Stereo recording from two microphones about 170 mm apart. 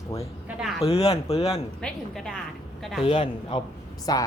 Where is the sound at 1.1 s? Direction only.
35° left (ahead or behind).